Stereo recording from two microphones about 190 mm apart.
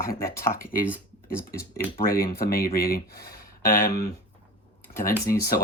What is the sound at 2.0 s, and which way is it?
Speech, 50° left (ahead or behind).